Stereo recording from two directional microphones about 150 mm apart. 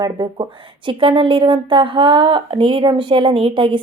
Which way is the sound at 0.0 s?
25° right (ahead or behind).